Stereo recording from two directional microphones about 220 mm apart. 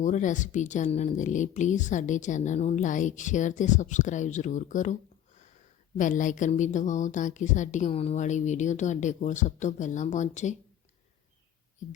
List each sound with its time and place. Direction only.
0.0 s speech: 35° left (ahead or behind)